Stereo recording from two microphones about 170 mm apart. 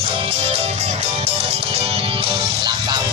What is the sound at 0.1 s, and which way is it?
Music, 35° right (ahead or behind).